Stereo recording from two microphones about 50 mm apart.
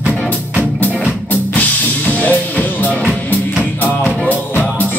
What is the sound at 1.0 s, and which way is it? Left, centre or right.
Music, left.